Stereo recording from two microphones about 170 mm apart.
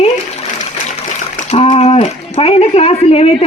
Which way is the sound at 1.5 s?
40° left (ahead or behind).